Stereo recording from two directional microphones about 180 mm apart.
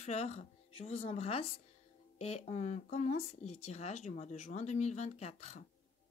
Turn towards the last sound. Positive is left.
turn(degrees=35)  # may be behind; listen again after turning